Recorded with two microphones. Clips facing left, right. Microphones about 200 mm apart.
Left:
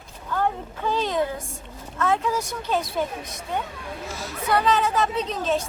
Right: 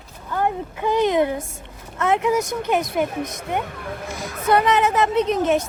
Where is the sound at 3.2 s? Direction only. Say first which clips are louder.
Right 8 dB; 50° right (ahead or behind).